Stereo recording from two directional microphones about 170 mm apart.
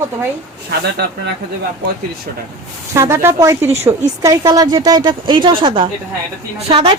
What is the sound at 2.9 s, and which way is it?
A woman's voice, 15° right (ahead or behind).